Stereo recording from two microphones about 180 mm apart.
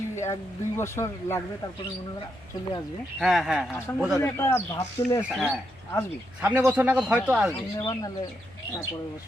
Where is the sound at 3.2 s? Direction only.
Centre (ahead or behind).